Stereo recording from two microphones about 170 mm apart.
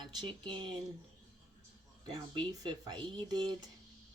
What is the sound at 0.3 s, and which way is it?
Speech, 30° right (ahead or behind).